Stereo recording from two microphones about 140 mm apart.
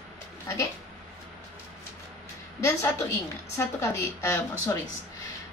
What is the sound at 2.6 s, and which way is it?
A woman's voice, 20° left (ahead or behind).